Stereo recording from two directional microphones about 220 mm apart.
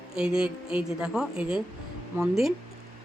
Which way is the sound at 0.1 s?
5° right (ahead or behind).